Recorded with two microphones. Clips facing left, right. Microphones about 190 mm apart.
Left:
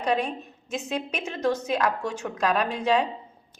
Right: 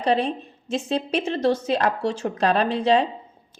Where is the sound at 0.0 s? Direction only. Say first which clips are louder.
Right 4 dB; 30° right (ahead or behind).